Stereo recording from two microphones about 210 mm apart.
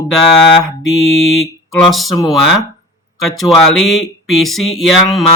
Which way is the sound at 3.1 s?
Centre (ahead or behind).